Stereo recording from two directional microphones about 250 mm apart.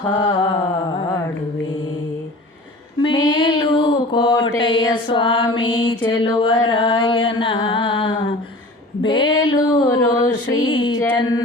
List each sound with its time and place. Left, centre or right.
0.1 s mantra: centre
3.0 s mantra: centre
6.7 s music: centre
9.0 s a sound: centre